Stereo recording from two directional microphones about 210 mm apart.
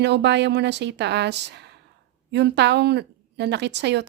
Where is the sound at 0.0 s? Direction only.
55° right (ahead or behind).